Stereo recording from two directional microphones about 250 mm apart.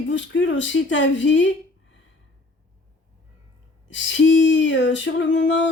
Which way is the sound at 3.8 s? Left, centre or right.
Left.